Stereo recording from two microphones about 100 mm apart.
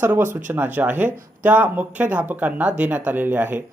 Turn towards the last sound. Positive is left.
turn(degrees=-20)  # may be behind; listen again after turning